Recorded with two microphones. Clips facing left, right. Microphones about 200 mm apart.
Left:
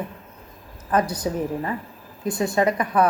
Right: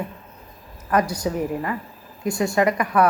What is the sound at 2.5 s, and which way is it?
Speech, 25° left (ahead or behind).